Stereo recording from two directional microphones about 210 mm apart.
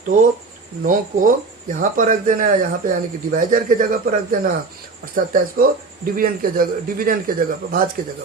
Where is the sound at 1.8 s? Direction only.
40° right (ahead or behind).